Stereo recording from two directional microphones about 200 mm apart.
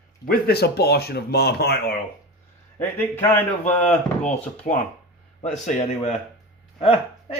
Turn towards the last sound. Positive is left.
turn(degrees=30)  # may be behind; listen again after turning